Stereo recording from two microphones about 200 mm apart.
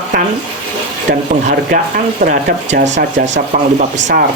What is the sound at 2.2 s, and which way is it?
Speech, 45° right (ahead or behind).